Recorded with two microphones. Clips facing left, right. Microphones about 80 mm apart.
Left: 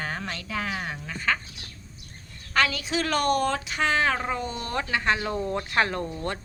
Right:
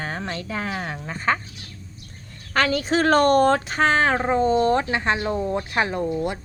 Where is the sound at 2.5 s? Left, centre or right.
Right; by 6.4 s centre.